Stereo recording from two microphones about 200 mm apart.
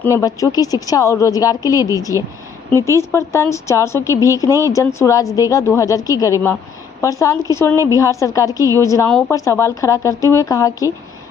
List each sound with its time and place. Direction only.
0.0 s speech: 15° left (ahead or behind)
2.7 s speech: 15° right (ahead or behind)
3.0 s speech: 15° left (ahead or behind)